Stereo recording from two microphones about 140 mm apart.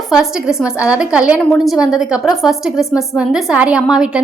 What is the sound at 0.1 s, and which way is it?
A woman's voice, 5° right (ahead or behind).